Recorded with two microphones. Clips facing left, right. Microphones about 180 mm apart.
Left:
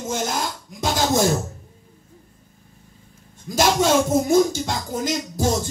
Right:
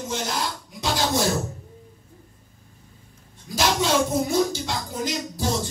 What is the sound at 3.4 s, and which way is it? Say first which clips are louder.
Music: left 4 dB; 45° left (ahead or behind).